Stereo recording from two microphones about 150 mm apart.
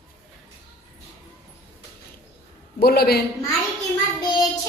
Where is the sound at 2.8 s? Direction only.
90° left.